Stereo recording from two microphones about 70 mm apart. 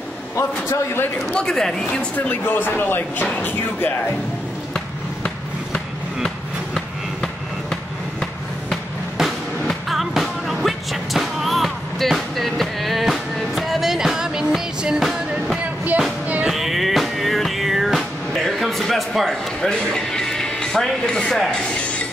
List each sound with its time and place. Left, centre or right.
1.3 s speech: centre
2.1 s speech: left
4.7 s basketball bounce: centre
6.2 s a sound: centre
9.2 s music: centre
15.6 s music: right
16.4 s music: centre
19.7 s speech: centre